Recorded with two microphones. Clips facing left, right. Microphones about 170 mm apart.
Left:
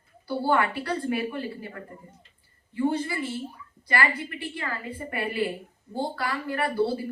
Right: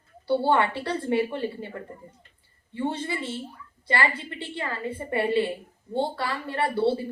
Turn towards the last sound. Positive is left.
turn(degrees=-25)  # may be behind; listen again after turning